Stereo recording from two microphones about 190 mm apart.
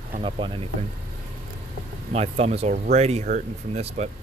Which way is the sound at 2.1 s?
35° right (ahead or behind).